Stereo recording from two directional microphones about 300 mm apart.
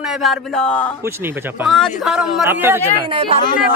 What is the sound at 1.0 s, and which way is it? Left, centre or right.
Speech, centre.